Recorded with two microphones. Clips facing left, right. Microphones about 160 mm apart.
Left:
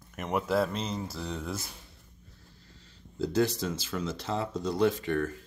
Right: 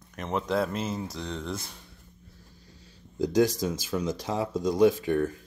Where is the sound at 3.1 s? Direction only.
15° right (ahead or behind).